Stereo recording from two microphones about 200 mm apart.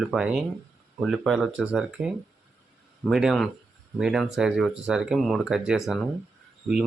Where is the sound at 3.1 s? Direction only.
Centre (ahead or behind).